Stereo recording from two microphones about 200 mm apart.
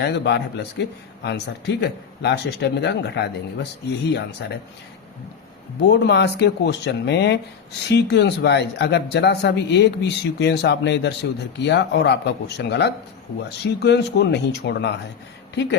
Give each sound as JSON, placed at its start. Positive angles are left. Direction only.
{"t": 0.0, "sound": "speech", "side_deg": 55}
{"t": 5.9, "sound": "speech", "side_deg": 60}